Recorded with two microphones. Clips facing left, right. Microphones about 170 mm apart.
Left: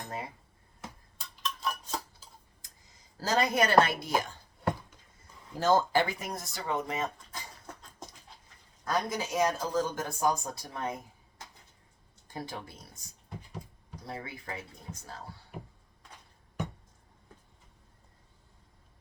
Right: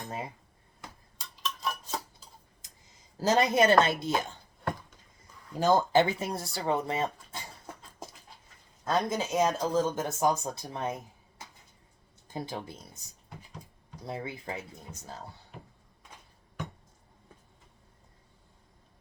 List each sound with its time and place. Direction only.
1.2 s cutlery: 5° right (ahead or behind)
3.2 s speech: 20° right (ahead or behind)
5.5 s speech: 15° right (ahead or behind)
8.8 s speech: 25° right (ahead or behind)
12.3 s speech: 20° right (ahead or behind)
14.1 s speech: 25° right (ahead or behind)